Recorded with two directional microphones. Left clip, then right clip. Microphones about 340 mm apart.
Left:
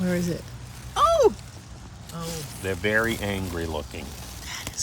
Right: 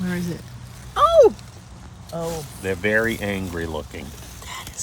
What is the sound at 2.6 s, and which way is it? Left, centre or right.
Speech, centre.